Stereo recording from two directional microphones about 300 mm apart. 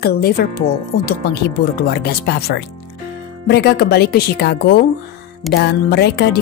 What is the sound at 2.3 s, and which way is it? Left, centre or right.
Speech, left.